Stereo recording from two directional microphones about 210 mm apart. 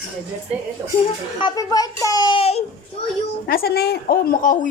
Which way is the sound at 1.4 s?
20° left (ahead or behind).